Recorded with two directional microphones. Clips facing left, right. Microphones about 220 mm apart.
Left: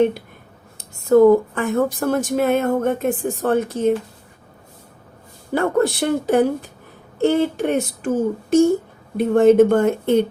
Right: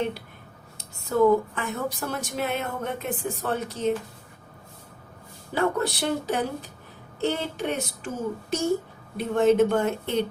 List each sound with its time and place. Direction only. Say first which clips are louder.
1.1 s speech: left 8 dB; 50° left (ahead or behind)
5.5 s speech: left 7 dB; 50° left (ahead or behind)